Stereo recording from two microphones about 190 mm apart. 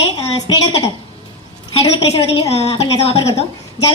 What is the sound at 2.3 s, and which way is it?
A woman's voice, 30° left (ahead or behind).